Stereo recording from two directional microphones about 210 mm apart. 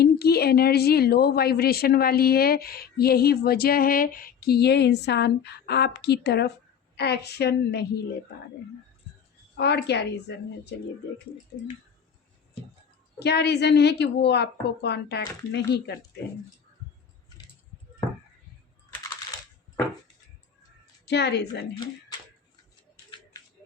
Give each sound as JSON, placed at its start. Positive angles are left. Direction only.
{"t": 0.0, "sound": "a woman's voice", "side_deg": 50}
{"t": 9.6, "sound": "a woman's voice", "side_deg": 50}
{"t": 13.1, "sound": "a woman's voice", "side_deg": 50}
{"t": 21.0, "sound": "a woman's voice", "side_deg": 55}